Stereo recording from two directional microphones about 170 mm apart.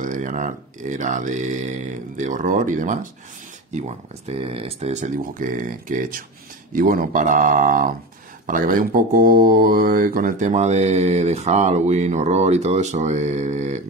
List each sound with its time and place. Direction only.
0.0 s speech: 50° right (ahead or behind)
4.3 s speech: 35° right (ahead or behind)